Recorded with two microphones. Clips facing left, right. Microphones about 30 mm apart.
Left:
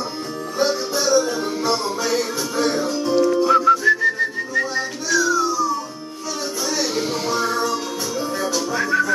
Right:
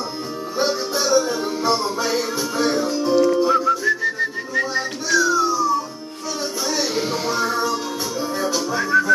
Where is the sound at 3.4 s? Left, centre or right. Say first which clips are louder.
Left 3 dB; centre.